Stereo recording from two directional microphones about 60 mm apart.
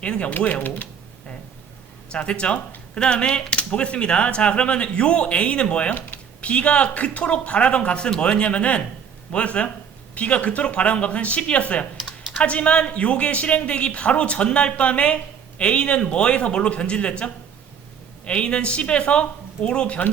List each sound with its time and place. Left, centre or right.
0.0 s speech: centre
2.1 s speech: centre